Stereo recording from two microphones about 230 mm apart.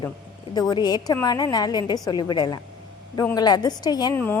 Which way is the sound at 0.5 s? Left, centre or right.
Centre.